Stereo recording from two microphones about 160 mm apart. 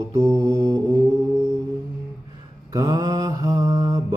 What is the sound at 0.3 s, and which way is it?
Mantra, 25° right (ahead or behind).